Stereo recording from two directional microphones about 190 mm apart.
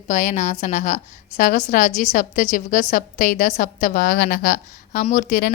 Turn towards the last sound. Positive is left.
turn(degrees=40)  # may be behind; listen again after turning